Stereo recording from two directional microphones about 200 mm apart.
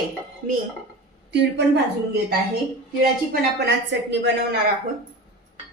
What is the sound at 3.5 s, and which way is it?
A woman's voice, 60° right (ahead or behind).